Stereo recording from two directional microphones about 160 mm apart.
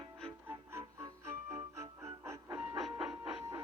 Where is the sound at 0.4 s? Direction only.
15° right (ahead or behind).